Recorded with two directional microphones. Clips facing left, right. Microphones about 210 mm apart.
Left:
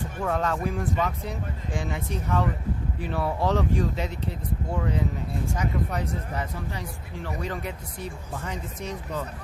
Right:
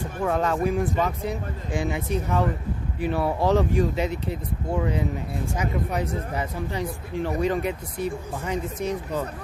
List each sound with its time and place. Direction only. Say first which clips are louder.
0.3 s speech: right 4 dB; 10° right (ahead or behind)
6.7 s speech: right 8 dB; 20° right (ahead or behind)